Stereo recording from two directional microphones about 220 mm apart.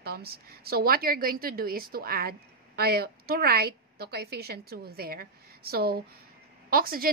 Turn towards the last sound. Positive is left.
turn(degrees=-40)  # may be behind; listen again after turning